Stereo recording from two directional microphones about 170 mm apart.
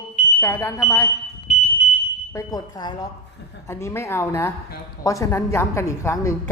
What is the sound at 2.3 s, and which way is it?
A woman's voice, 20° left (ahead or behind).